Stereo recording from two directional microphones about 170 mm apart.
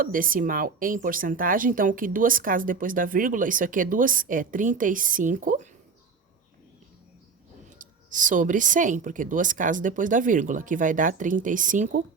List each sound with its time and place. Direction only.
0.0 s speech: 55° right (ahead or behind)
7.8 s speech: 50° right (ahead or behind)